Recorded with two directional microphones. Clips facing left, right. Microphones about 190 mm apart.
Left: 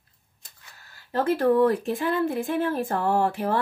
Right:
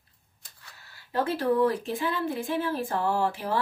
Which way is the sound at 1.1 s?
50° left (ahead or behind).